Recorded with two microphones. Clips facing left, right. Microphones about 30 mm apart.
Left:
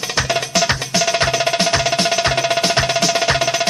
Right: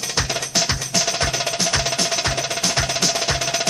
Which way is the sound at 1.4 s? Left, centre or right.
Left.